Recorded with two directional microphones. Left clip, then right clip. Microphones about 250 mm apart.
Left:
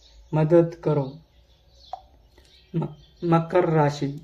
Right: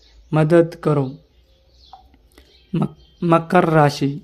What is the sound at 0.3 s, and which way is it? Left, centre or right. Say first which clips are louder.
Speech: right 4 dB; right.